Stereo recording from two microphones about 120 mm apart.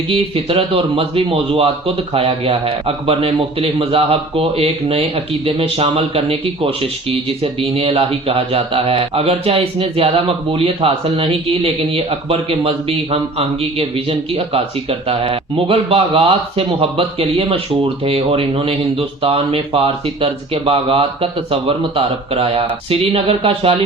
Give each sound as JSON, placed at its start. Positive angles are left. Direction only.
{"t": 0.1, "sound": "a man's voice", "side_deg": -50}